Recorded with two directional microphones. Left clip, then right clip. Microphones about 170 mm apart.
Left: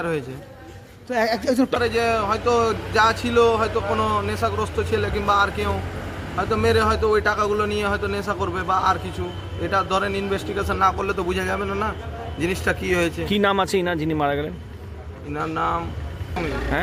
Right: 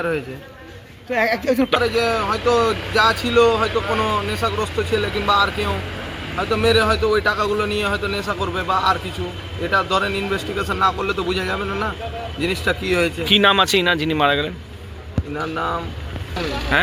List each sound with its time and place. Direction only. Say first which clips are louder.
1.1 s a woman's voice: right 2 dB; 35° left (ahead or behind)
1.7 s speech: right 2 dB; 10° left (ahead or behind)
13.0 s speech: right 5 dB; 10° left (ahead or behind)